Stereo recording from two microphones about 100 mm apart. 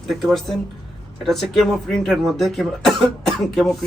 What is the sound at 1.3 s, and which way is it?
Speech, 5° left (ahead or behind).